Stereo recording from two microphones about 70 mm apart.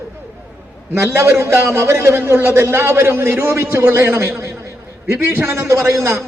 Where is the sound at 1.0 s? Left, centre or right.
Right.